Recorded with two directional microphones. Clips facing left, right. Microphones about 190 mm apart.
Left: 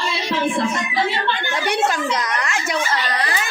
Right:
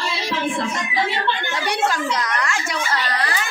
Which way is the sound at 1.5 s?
20° left (ahead or behind).